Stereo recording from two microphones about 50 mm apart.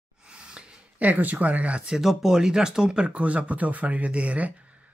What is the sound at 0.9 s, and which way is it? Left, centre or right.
Speech, right.